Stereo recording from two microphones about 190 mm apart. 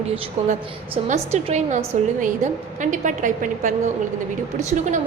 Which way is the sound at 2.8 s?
40° right (ahead or behind).